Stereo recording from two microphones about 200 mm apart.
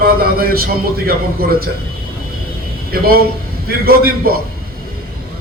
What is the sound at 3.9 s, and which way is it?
Speech, 50° right (ahead or behind).